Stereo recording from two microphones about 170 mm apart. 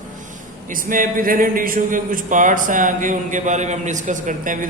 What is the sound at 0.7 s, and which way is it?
A man's voice, 55° right (ahead or behind).